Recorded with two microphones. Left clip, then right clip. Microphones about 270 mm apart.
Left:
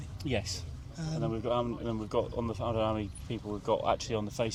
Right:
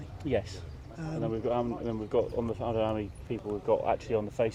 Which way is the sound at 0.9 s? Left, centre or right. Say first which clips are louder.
Right 2 dB; left.